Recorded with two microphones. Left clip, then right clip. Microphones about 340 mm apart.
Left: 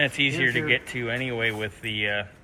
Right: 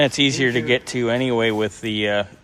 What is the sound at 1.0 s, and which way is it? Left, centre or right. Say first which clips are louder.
Speech: right 7 dB; right.